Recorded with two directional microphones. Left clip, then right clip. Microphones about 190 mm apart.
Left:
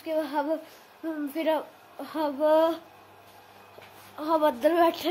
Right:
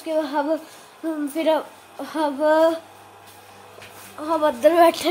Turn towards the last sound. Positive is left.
turn(degrees=5)  # may be behind; listen again after turning